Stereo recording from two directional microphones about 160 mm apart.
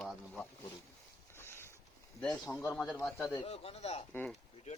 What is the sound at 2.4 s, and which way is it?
Speech, 10° left (ahead or behind).